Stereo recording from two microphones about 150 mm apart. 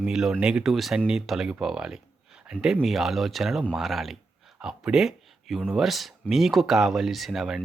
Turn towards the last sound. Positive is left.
turn(degrees=0)  # may be behind; listen again after turning